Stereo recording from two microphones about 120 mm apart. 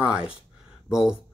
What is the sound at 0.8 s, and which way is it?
Speech, 5° right (ahead or behind).